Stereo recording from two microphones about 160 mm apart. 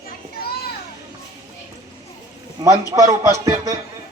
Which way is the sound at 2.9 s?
20° right (ahead or behind).